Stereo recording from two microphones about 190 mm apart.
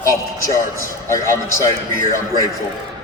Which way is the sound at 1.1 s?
15° left (ahead or behind).